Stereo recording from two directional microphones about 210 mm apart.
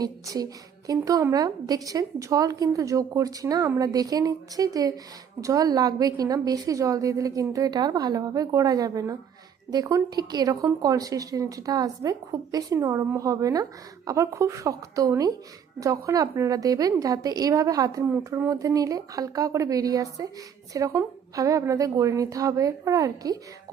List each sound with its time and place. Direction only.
0.0 s a woman's voice: 20° right (ahead or behind)